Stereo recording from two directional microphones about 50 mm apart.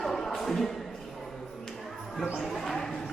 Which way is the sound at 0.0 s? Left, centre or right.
Centre.